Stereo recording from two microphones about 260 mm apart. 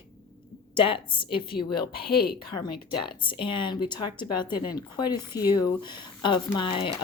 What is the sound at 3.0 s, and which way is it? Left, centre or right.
Speech, centre.